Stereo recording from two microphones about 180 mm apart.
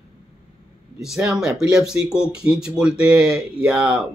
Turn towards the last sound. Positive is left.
turn(degrees=-5)  # may be behind; listen again after turning